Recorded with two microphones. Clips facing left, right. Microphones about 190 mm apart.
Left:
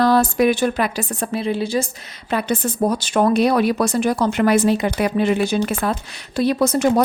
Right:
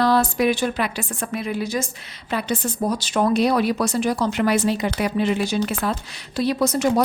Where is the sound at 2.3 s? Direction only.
55° left (ahead or behind).